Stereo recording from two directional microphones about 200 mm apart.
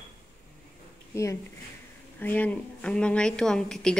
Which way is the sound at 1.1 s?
15° left (ahead or behind).